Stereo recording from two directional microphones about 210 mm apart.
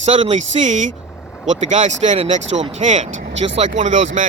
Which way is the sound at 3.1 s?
60° right (ahead or behind).